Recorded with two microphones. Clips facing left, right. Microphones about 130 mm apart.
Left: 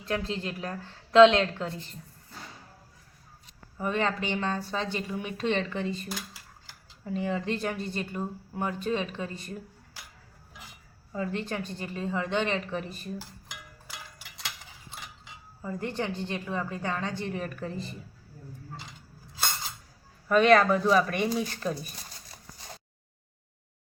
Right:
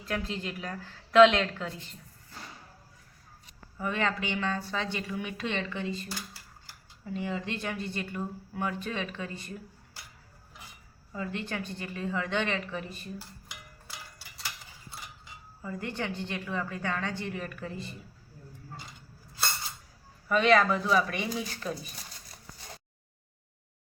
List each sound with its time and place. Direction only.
0.0 s a woman's voice: 30° left (ahead or behind)
3.8 s speech: 30° left (ahead or behind)
7.0 s a woman's voice: 40° left (ahead or behind); by 9.3 s 25° left (ahead or behind)
11.1 s speech: 35° left (ahead or behind)
11.8 s a woman's voice: 25° left (ahead or behind)
13.8 s a sound: 90° left
15.6 s a woman's voice: 30° left (ahead or behind)
17.2 s speech: 35° left (ahead or behind)
20.2 s speech: 45° left (ahead or behind)